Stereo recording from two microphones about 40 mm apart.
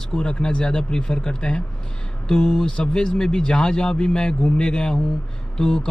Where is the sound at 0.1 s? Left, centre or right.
Centre.